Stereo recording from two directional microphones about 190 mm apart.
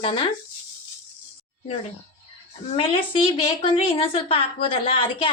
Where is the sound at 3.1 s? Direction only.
30° left (ahead or behind).